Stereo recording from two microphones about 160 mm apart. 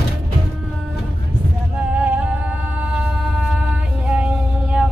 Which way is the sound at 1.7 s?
10° right (ahead or behind).